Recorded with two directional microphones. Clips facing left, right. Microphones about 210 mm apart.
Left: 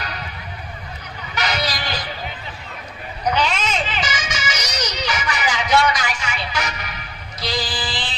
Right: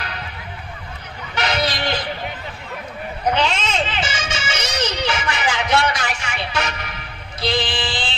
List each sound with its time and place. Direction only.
1.3 s vehicle: 25° right (ahead or behind)
3.3 s music: 25° right (ahead or behind)